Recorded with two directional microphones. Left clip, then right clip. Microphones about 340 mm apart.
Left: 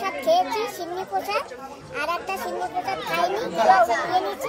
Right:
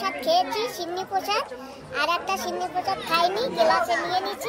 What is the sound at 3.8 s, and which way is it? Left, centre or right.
Speech, left.